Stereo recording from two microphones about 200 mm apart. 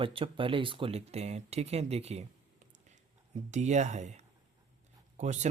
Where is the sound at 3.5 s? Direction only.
35° right (ahead or behind).